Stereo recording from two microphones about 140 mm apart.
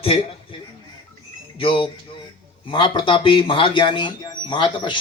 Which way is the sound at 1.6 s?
40° left (ahead or behind).